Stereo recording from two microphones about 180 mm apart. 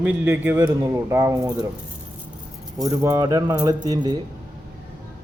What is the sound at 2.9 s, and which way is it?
Speech, 20° right (ahead or behind).